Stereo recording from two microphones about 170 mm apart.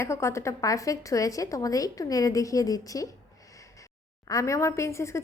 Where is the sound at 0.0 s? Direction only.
15° left (ahead or behind).